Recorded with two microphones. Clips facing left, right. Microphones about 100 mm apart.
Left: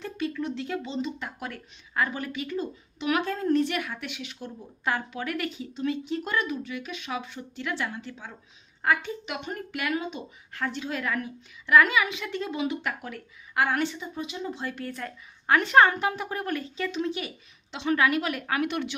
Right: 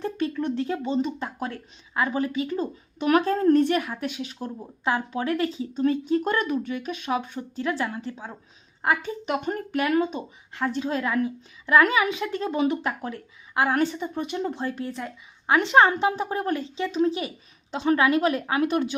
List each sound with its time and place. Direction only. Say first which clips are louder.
0.0 s speech: right 4 dB; 40° right (ahead or behind)
5.7 s speech: right 7 dB; 40° right (ahead or behind)
10.7 s speech: right 5 dB; 30° right (ahead or behind)
12.8 s a woman's voice: right 4 dB; 30° right (ahead or behind)
13.8 s speech: right 5 dB; 50° right (ahead or behind)
14.6 s a woman's voice: right 4 dB; 30° right (ahead or behind)
18.7 s speech: right 6 dB; 40° right (ahead or behind)